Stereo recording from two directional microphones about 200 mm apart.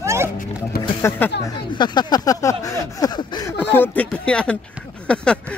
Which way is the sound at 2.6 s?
15° left (ahead or behind).